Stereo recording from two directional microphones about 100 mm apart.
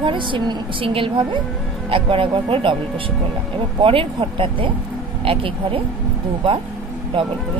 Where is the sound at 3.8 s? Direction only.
60° right (ahead or behind).